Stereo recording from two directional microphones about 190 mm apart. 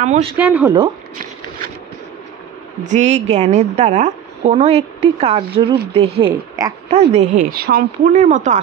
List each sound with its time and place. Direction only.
0.0 s a woman's voice: 35° right (ahead or behind)
0.4 s speech: 10° right (ahead or behind)
2.8 s a woman's voice: 40° right (ahead or behind); by 6.7 s 20° right (ahead or behind)
6.9 s speech: 35° right (ahead or behind); by 8.1 s 50° right (ahead or behind)
8.1 s a woman's voice: 40° right (ahead or behind)